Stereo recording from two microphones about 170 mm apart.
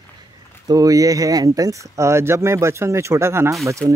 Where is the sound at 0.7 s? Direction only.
20° right (ahead or behind).